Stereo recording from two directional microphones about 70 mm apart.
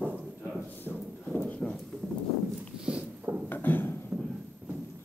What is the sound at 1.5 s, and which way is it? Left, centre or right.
Clip-clop, centre.